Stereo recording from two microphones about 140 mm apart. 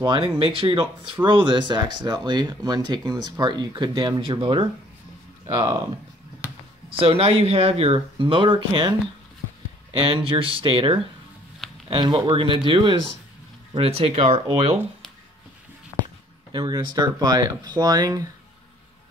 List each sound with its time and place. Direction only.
0.0 s speech: 35° right (ahead or behind)
6.9 s speech: 40° right (ahead or behind)
10.0 s speech: 40° right (ahead or behind)
13.7 s speech: 45° right (ahead or behind)
16.5 s speech: 30° right (ahead or behind)